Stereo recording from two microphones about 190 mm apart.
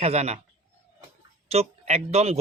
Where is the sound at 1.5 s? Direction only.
35° right (ahead or behind).